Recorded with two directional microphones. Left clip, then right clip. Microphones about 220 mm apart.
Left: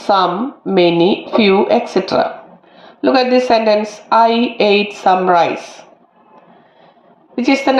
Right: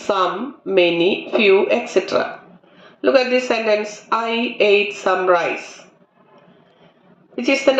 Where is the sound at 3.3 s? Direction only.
35° left (ahead or behind).